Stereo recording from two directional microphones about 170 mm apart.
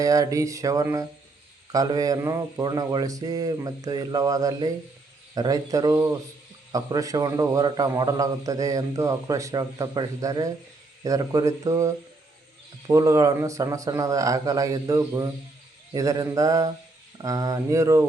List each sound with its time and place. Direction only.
0.0 s a man's voice: 20° right (ahead or behind)